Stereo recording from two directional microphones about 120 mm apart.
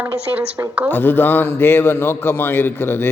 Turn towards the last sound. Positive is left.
turn(degrees=20)  # may be behind; listen again after turning